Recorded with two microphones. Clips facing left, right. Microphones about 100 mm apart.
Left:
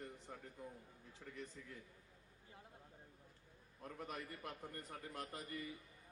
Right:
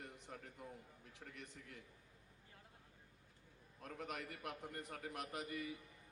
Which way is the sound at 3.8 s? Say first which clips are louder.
Right 1 dB; 90° right.